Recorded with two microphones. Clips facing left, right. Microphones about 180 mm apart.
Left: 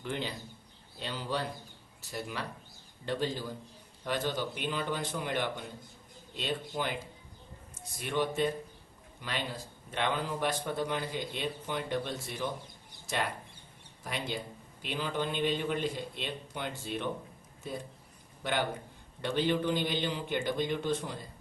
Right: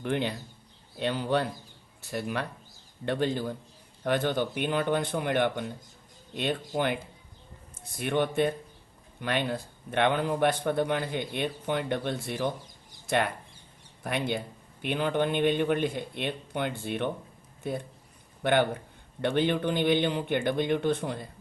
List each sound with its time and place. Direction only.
0.0 s a man's voice: 60° right (ahead or behind)
7.9 s a man's voice: 60° right (ahead or behind)
14.0 s a man's voice: 60° right (ahead or behind)
18.4 s a man's voice: 60° right (ahead or behind)